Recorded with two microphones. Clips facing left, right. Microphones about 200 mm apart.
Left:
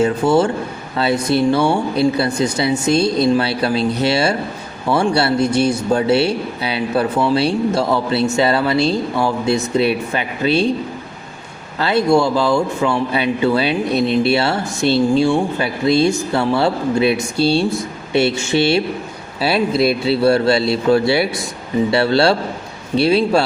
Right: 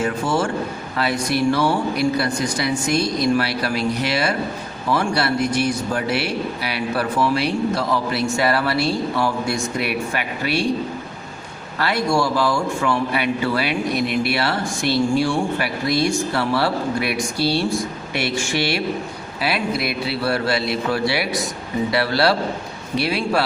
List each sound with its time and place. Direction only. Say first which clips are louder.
0.0 s speech: left 7 dB; 25° left (ahead or behind)
11.8 s speech: left 6 dB; 25° left (ahead or behind)